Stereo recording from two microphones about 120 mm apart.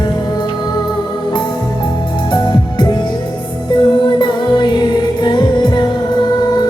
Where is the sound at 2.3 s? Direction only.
35° left (ahead or behind).